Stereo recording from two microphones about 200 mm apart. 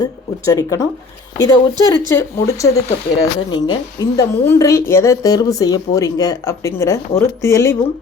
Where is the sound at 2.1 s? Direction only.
15° left (ahead or behind).